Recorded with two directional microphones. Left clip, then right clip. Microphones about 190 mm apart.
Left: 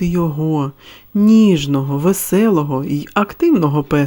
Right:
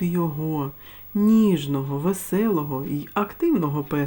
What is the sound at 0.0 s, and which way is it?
Speech, 40° left (ahead or behind).